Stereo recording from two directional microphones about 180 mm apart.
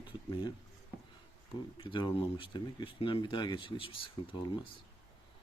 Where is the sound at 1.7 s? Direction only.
25° left (ahead or behind).